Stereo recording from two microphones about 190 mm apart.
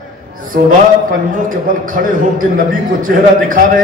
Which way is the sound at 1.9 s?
45° right (ahead or behind).